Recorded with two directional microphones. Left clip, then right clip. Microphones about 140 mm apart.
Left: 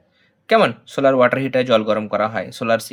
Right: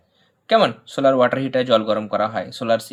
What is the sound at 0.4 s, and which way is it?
Speech, 35° left (ahead or behind).